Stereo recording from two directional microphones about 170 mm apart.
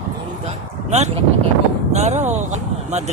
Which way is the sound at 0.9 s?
40° right (ahead or behind).